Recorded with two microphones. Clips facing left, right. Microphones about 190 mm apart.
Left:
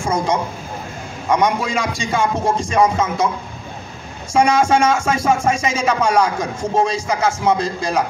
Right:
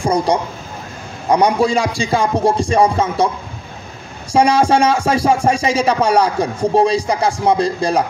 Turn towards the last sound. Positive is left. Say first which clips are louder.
# right 3 dB
turn(degrees=-35)  # may be behind; listen again after turning